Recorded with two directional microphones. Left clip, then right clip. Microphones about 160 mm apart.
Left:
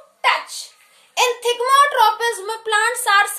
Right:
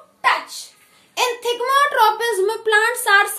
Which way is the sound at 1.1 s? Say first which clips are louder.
Left 2 dB; 30° left (ahead or behind).